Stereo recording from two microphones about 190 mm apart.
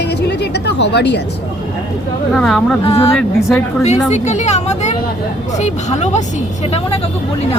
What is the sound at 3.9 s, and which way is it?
Speech, 35° left (ahead or behind).